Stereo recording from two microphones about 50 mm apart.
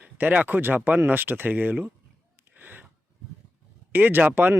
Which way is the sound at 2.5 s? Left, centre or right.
Right.